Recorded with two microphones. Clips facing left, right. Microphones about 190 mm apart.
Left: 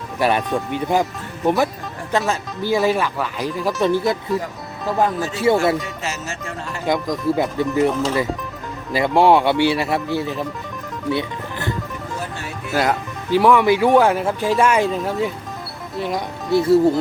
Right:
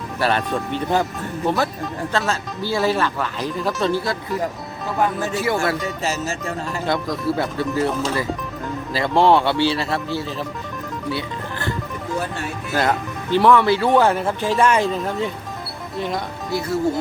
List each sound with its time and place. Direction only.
0.2 s speech: 15° left (ahead or behind)
5.4 s speech: 25° left (ahead or behind)
6.0 s speech: 35° right (ahead or behind)
6.8 s speech: 15° left (ahead or behind)
11.1 s music: 20° left (ahead or behind)
12.7 s speech: 10° left (ahead or behind)